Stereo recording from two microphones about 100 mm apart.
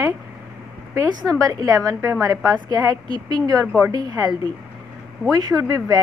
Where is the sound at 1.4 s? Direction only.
35° right (ahead or behind).